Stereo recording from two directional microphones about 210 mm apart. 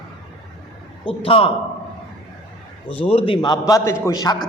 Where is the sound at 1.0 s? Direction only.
25° left (ahead or behind).